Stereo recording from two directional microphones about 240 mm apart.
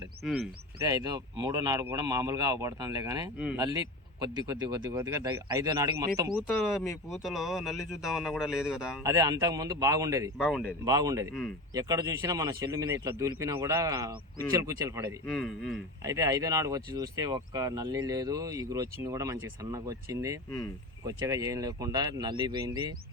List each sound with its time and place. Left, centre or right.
0.9 s speech: centre
3.6 s speech: centre
6.3 s speech: centre
9.0 s speech: centre
10.3 s speech: centre
10.8 s speech: centre
15.4 s speech: centre
16.0 s speech: centre